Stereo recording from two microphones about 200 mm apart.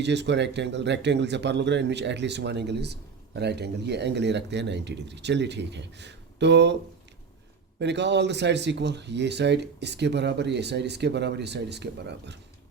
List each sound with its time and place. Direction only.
0.0 s speech: 60° right (ahead or behind)
7.8 s speech: 60° right (ahead or behind)